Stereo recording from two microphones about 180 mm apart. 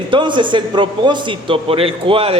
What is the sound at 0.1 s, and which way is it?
A man's voice, 25° right (ahead or behind).